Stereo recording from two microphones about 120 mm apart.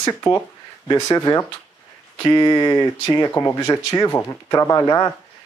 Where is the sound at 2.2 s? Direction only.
40° left (ahead or behind).